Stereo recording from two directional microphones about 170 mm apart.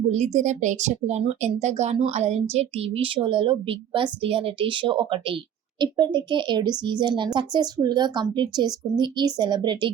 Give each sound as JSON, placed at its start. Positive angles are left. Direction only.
{"t": 0.1, "sound": "speech", "side_deg": -45}